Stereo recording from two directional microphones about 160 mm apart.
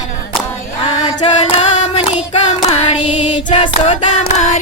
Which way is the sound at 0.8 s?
40° left (ahead or behind).